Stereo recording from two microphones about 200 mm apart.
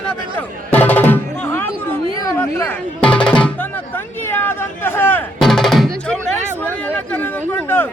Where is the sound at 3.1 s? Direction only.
5° left (ahead or behind).